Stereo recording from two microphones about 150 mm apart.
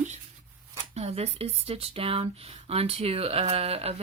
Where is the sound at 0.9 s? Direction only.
45° right (ahead or behind).